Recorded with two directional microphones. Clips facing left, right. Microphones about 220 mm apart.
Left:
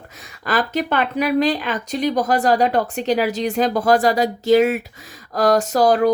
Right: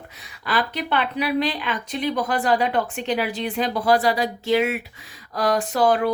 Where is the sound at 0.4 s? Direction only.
45° left (ahead or behind).